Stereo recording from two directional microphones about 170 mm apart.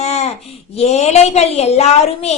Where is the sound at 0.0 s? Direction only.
40° left (ahead or behind).